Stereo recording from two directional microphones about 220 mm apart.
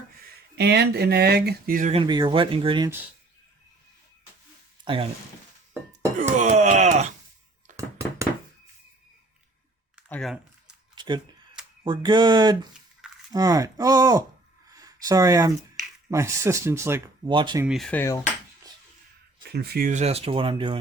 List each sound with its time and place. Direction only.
0.5 s speech: 50° right (ahead or behind)
2.0 s speech: 20° right (ahead or behind)
4.9 s speech: 20° right (ahead or behind)
6.1 s speech: 35° right (ahead or behind)
7.8 s a sound: 15° right (ahead or behind)
10.1 s typing: centre (ahead or behind)
10.9 s camera: 20° right (ahead or behind)
11.9 s speech: 20° right (ahead or behind)
14.7 s a sound: 15° right (ahead or behind)
16.0 s speech: 15° right (ahead or behind)
17.7 s cutlery: centre (ahead or behind)
19.4 s speech: 45° right (ahead or behind); by 20.7 s 25° right (ahead or behind)